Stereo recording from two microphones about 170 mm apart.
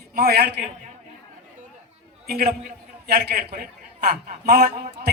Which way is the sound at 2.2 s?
65° right (ahead or behind).